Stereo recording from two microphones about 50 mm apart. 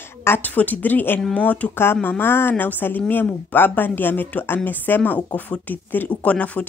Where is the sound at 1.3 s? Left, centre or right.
Left.